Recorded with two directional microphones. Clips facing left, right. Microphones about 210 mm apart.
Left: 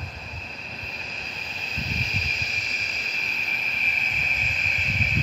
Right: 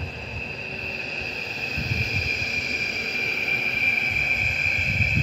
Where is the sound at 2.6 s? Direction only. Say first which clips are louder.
Right 7 dB; 60° right (ahead or behind).